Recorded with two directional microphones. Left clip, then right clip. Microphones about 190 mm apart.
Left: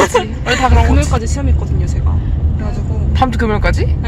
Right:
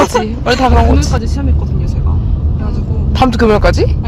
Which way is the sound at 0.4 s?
25° right (ahead or behind).